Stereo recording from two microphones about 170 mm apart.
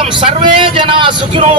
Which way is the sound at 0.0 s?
30° right (ahead or behind).